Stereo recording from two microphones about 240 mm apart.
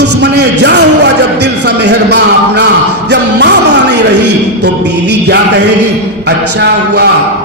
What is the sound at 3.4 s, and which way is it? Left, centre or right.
Speech, right.